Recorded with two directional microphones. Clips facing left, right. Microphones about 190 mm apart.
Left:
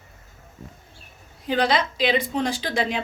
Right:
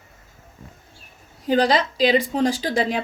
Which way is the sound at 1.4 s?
40° right (ahead or behind).